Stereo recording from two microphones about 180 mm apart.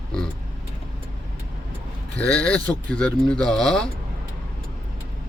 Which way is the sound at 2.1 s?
5° left (ahead or behind).